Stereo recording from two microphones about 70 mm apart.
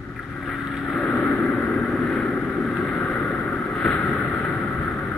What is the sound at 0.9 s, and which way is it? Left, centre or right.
Vehicle, centre.